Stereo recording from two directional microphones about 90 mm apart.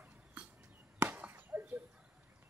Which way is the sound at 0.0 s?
20° right (ahead or behind).